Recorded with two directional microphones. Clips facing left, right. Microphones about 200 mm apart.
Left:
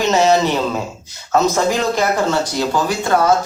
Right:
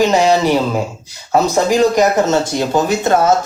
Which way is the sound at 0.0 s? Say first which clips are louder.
Right 2 dB; 15° right (ahead or behind).